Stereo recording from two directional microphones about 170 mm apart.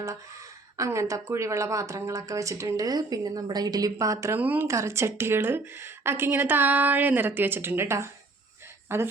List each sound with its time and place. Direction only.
0.8 s speech: 20° right (ahead or behind)